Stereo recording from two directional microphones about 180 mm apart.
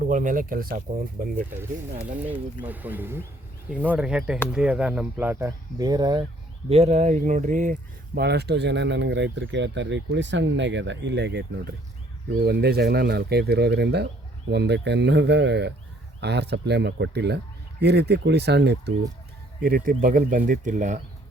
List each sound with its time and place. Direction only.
0.0 s speech: 45° right (ahead or behind)
2.6 s speech: 10° right (ahead or behind)
6.7 s speech: 35° right (ahead or behind); by 18.9 s 70° right (ahead or behind)
19.6 s speech: 55° right (ahead or behind)